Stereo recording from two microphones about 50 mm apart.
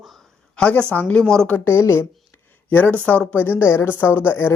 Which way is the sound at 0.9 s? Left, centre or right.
Left.